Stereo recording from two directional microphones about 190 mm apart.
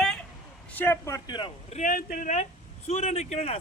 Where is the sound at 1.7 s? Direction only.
45° left (ahead or behind).